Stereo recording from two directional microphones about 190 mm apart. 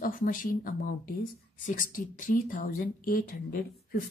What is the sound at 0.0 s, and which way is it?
Speech, 45° left (ahead or behind).